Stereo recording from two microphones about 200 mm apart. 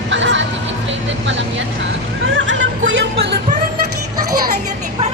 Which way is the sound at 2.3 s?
75° right (ahead or behind).